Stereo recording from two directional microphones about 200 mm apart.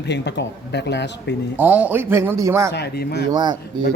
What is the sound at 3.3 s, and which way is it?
Speech, 20° right (ahead or behind).